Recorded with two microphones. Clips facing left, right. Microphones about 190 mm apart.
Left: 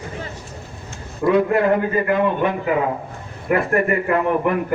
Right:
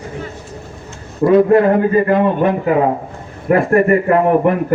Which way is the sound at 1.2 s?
40° right (ahead or behind).